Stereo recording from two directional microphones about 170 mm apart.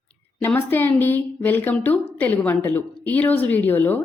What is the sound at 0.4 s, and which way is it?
A woman's voice, 10° left (ahead or behind).